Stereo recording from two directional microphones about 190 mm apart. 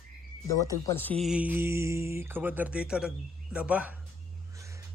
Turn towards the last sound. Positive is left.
turn(degrees=-15)  # may be behind; listen again after turning